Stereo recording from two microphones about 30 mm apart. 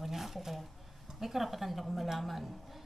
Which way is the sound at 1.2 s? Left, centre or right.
Centre.